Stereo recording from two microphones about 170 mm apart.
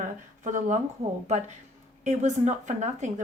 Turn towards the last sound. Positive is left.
turn(degrees=-45)  # may be behind; listen again after turning